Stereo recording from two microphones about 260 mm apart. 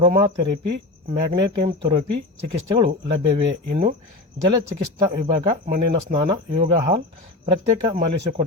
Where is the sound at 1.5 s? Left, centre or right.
Centre.